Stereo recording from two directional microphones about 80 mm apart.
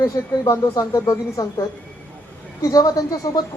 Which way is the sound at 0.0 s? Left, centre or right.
Left.